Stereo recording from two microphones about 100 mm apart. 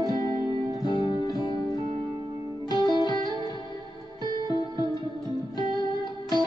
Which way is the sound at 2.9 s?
45° left (ahead or behind).